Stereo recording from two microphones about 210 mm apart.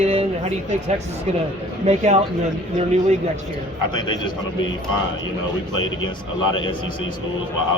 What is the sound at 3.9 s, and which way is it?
Speech, 20° left (ahead or behind).